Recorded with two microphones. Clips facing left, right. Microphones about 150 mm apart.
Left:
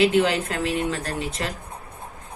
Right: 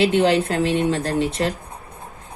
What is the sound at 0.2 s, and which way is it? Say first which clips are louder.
Speech: right 4 dB; 35° right (ahead or behind).